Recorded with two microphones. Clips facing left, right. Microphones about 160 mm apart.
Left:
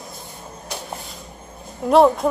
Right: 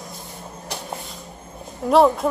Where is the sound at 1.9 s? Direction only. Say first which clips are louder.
Left 1 dB; centre (ahead or behind).